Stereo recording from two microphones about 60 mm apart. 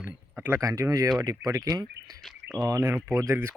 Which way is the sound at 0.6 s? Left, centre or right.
Right.